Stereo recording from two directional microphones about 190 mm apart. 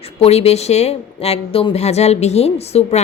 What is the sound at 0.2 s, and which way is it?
A woman's voice, 35° left (ahead or behind).